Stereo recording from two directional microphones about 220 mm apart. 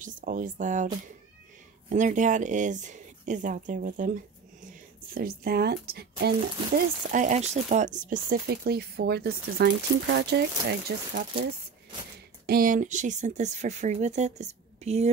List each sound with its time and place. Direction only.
0.0 s speech: 35° right (ahead or behind)
1.9 s speech: 35° right (ahead or behind)
7.1 s speech: 35° right (ahead or behind)
12.4 s speech: 40° right (ahead or behind)